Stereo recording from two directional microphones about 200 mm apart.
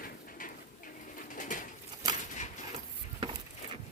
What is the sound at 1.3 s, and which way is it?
Bird, 40° left (ahead or behind).